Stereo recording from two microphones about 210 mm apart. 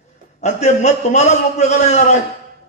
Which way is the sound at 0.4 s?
35° left (ahead or behind).